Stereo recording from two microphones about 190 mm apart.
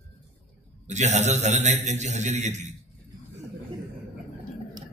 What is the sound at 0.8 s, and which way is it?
A man's voice, 40° right (ahead or behind).